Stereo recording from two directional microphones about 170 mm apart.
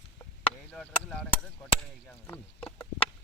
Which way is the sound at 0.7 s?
5° left (ahead or behind).